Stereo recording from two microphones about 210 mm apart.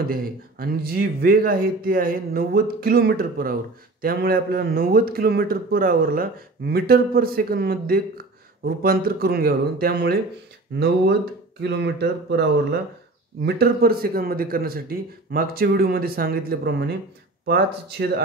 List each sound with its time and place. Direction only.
0.1 s speech: 45° right (ahead or behind)
11.6 s speech: 55° right (ahead or behind)